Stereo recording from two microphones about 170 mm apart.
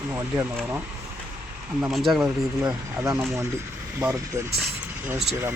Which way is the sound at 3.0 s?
10° right (ahead or behind).